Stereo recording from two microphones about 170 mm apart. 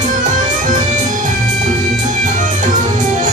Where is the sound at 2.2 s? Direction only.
50° right (ahead or behind).